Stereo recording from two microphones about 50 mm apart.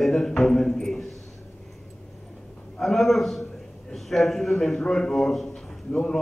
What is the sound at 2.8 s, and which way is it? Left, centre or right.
A man's voice, centre.